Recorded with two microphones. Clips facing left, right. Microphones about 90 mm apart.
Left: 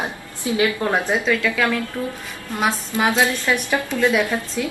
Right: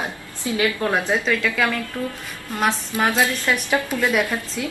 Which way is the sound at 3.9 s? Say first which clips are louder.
Left 3 dB; 10° right (ahead or behind).